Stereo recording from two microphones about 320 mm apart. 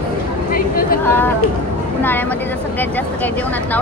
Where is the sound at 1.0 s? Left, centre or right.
Centre.